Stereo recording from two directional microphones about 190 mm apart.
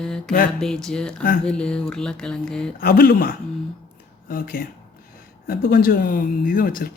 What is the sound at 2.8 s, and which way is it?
Speech, 55° left (ahead or behind).